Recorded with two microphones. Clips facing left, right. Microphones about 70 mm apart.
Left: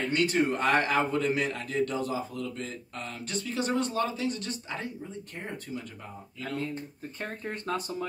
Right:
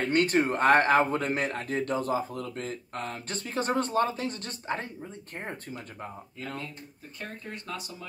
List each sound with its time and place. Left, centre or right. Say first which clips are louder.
0.0 s a man's voice: right 2 dB; right
6.6 s speech: left 7 dB; left